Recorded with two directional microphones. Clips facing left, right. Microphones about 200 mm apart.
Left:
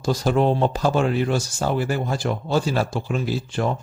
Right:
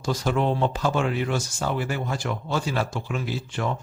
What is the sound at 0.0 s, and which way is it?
Speech, 35° left (ahead or behind).